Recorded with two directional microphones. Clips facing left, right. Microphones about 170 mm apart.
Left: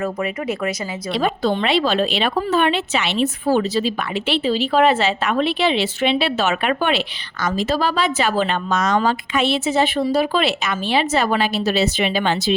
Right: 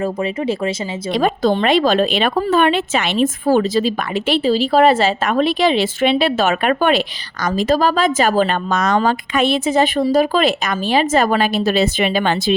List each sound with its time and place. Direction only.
0.0 s speech: 30° right (ahead or behind)
1.1 s speech: 45° right (ahead or behind)